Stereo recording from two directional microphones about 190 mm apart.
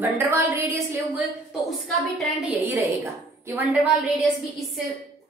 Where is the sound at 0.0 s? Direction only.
15° right (ahead or behind).